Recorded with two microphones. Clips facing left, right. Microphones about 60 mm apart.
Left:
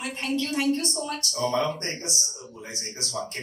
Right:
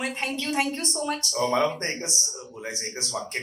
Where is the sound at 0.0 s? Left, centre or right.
Right.